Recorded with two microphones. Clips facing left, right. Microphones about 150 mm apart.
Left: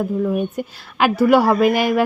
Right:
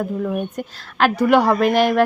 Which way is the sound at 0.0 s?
5° left (ahead or behind).